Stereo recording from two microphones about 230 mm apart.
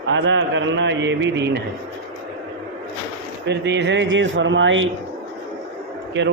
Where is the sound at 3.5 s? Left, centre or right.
Right.